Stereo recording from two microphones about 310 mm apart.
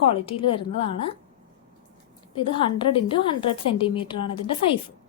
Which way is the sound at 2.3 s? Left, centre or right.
Centre.